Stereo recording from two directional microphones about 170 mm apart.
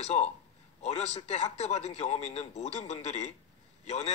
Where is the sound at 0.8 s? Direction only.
40° left (ahead or behind).